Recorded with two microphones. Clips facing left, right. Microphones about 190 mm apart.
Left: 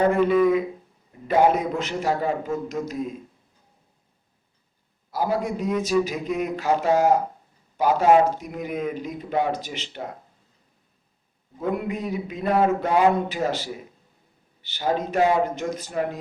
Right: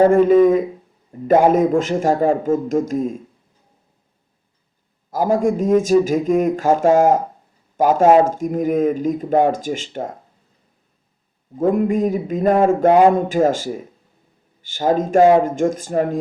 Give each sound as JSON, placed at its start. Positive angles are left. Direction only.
{"t": 0.0, "sound": "speech", "side_deg": -45}
{"t": 5.1, "sound": "speech", "side_deg": -45}
{"t": 11.5, "sound": "speech", "side_deg": -45}